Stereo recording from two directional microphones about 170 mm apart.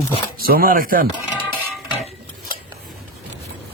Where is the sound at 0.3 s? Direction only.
60° right (ahead or behind).